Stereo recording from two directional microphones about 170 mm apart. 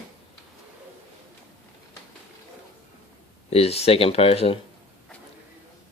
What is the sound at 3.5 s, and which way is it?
Speech, 35° left (ahead or behind).